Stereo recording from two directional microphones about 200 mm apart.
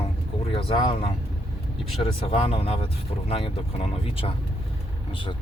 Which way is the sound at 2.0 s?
30° left (ahead or behind).